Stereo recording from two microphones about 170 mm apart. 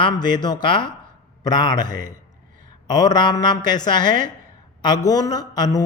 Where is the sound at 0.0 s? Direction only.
25° left (ahead or behind).